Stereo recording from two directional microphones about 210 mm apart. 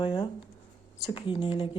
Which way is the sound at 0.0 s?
20° left (ahead or behind).